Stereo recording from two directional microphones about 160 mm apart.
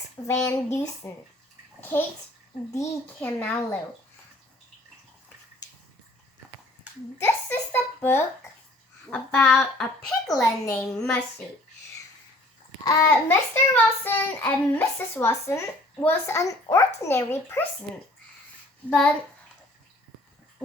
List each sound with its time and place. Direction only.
0.3 s speech: 20° left (ahead or behind)
1.8 s child singing: 10° left (ahead or behind)
7.2 s a child's voice: 15° left (ahead or behind)
12.8 s child singing: 20° left (ahead or behind)
18.9 s a child's voice: 5° left (ahead or behind)